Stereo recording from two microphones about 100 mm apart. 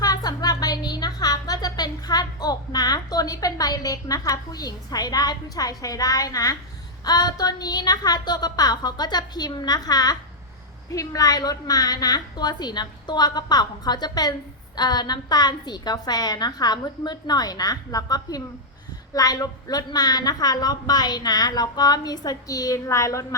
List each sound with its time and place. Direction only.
0.0 s a woman's voice: 40° left (ahead or behind)